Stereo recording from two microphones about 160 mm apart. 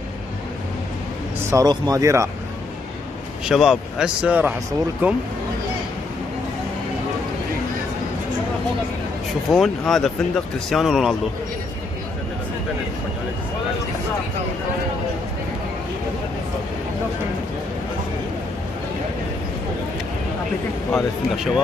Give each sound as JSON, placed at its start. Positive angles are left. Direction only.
{"t": 1.5, "sound": "speech", "side_deg": -20}
{"t": 3.4, "sound": "speech", "side_deg": 0}
{"t": 9.5, "sound": "speech", "side_deg": 0}
{"t": 20.9, "sound": "speech", "side_deg": 0}